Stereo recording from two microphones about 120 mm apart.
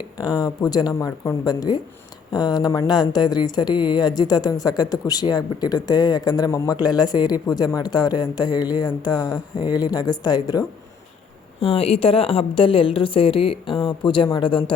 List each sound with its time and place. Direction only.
0.2 s speech: 30° left (ahead or behind)
0.9 s speech: 25° left (ahead or behind)
11.6 s a woman's voice: 55° left (ahead or behind)